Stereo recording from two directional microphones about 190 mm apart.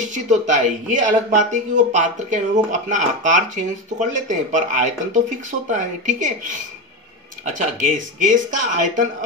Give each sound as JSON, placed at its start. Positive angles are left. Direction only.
{"t": 0.0, "sound": "speech", "side_deg": -40}
{"t": 7.5, "sound": "speech", "side_deg": -40}